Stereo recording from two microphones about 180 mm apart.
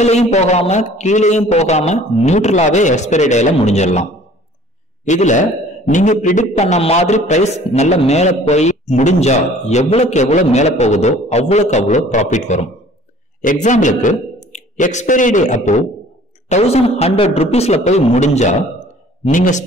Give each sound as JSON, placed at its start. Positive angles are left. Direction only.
{"t": 0.0, "sound": "a man's voice", "side_deg": 40}
{"t": 5.0, "sound": "a man's voice", "side_deg": 40}